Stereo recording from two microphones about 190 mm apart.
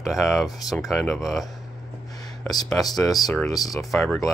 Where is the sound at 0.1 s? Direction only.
Centre (ahead or behind).